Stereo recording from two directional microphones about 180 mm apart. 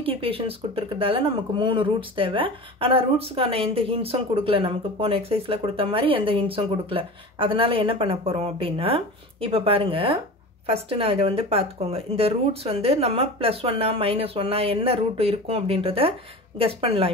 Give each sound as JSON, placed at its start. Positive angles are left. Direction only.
{"t": 0.0, "sound": "speech", "side_deg": -30}